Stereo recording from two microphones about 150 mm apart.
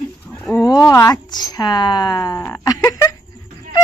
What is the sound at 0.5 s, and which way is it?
Speech, 20° left (ahead or behind).